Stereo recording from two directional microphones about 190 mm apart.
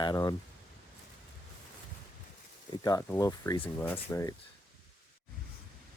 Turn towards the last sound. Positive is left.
turn(degrees=15)  # may be behind; listen again after turning